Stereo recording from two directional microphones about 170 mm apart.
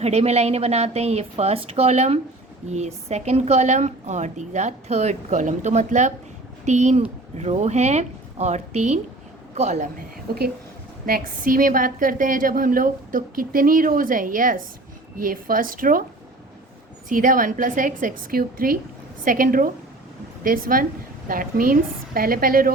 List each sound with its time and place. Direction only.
0.0 s a woman's voice: 40° right (ahead or behind)
10.3 s a woman's voice: 65° right (ahead or behind)
17.1 s a woman's voice: 50° right (ahead or behind)